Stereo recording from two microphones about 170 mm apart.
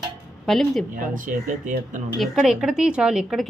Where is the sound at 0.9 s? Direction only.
55° right (ahead or behind).